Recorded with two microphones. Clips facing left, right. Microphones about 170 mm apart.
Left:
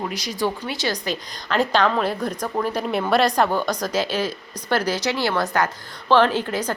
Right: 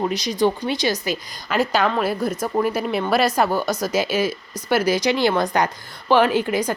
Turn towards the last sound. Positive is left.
turn(degrees=-10)  # may be behind; listen again after turning